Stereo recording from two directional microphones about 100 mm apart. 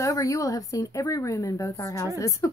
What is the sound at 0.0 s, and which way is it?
Speech, 35° left (ahead or behind).